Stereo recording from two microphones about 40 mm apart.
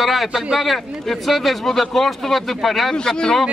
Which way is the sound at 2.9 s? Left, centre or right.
Left.